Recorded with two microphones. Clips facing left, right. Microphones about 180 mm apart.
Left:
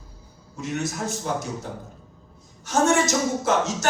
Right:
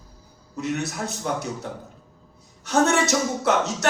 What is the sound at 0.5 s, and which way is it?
Speech, 65° right (ahead or behind).